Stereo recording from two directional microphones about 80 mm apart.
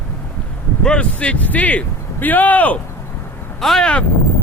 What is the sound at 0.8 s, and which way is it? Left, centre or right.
Speech, centre.